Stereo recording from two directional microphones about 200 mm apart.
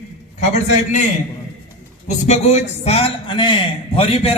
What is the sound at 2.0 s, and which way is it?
A man's voice, 35° left (ahead or behind).